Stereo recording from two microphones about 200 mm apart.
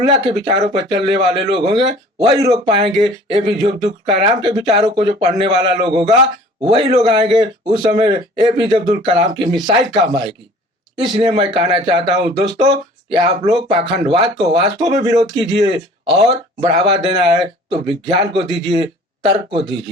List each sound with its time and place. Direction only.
0.1 s speech: 25° right (ahead or behind)